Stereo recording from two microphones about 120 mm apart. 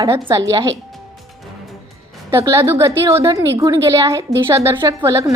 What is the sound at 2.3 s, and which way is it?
A woman's voice, 20° right (ahead or behind).